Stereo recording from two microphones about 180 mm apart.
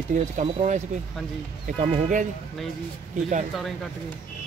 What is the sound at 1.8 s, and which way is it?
Speech, 45° right (ahead or behind).